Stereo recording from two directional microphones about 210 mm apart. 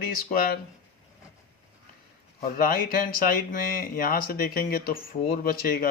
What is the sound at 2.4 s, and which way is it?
A man's voice, 45° left (ahead or behind).